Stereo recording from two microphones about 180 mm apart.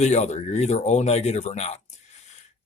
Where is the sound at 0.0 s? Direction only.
40° left (ahead or behind).